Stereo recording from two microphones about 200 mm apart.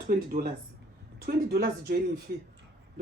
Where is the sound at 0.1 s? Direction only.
40° right (ahead or behind).